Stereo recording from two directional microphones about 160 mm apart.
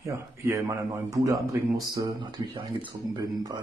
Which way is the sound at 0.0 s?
20° right (ahead or behind).